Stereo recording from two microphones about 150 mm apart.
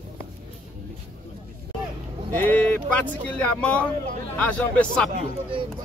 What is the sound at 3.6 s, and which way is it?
Speech, 10° left (ahead or behind).